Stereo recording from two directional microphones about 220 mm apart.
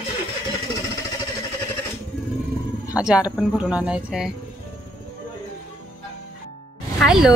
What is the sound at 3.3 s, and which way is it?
Speech, 5° right (ahead or behind).